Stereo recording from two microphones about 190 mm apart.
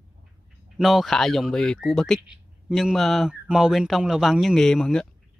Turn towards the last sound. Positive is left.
turn(degrees=5)  # may be behind; listen again after turning